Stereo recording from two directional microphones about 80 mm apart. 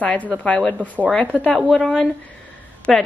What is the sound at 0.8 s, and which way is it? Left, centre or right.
Speech, right.